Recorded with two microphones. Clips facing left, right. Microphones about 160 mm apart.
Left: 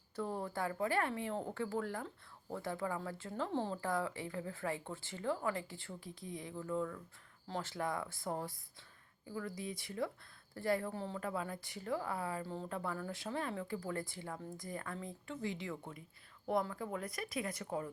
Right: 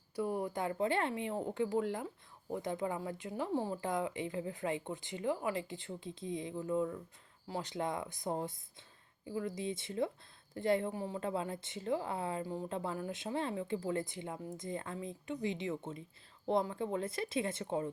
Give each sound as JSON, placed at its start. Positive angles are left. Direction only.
{"t": 0.2, "sound": "a woman's voice", "side_deg": -15}